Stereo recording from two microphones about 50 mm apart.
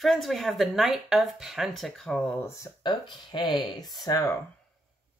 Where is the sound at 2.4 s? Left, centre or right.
Left.